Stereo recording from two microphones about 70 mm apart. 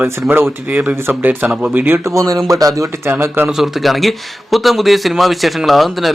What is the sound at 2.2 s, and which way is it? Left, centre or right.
Speech, right.